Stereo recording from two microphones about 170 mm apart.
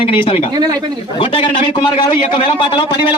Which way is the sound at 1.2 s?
30° left (ahead or behind).